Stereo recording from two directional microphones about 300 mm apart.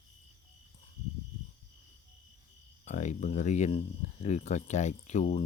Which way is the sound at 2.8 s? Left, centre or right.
Left.